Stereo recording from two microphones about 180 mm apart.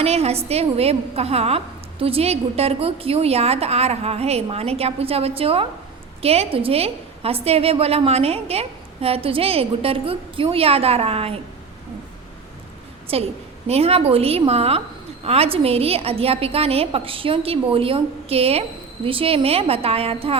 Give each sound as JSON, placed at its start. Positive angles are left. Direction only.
{"t": 0.0, "sound": "a woman's voice", "side_deg": -35}
{"t": 13.1, "sound": "a woman's voice", "side_deg": -30}